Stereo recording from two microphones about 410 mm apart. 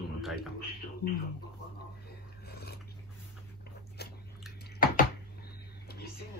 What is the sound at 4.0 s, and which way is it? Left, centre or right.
Biting, left.